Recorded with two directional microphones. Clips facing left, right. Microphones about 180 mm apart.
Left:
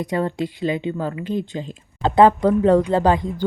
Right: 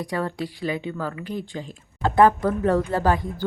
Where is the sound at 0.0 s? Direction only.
20° left (ahead or behind).